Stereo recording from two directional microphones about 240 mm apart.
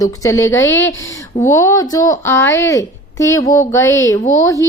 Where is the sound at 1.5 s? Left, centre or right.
Centre.